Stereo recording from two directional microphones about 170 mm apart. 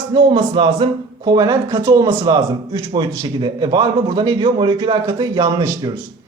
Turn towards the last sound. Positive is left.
turn(degrees=-30)  # may be behind; listen again after turning